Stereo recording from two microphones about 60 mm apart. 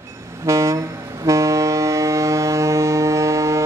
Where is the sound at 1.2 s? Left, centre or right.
Right.